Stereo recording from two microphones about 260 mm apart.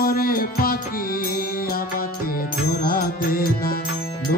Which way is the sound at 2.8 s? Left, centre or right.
Left.